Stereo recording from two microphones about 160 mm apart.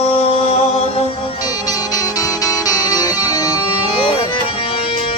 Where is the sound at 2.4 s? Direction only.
20° left (ahead or behind).